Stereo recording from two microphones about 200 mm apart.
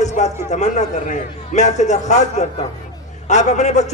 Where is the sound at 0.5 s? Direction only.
35° left (ahead or behind).